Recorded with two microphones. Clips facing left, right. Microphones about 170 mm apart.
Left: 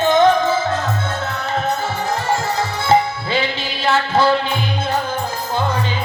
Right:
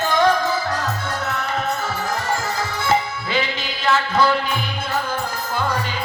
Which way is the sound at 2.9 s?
30° left (ahead or behind).